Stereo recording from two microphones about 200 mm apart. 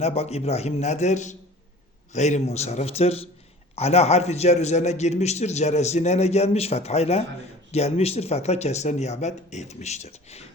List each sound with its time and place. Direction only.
0.0 s a man's voice: 30° left (ahead or behind)